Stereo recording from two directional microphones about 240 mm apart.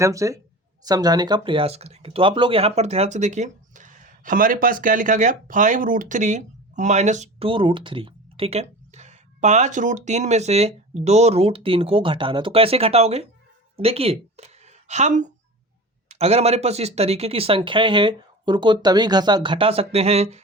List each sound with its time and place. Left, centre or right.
0.0 s a woman's voice: centre